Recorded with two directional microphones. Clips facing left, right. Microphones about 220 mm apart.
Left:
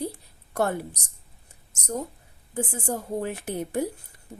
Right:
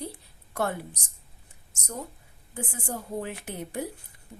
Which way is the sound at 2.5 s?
40° left (ahead or behind).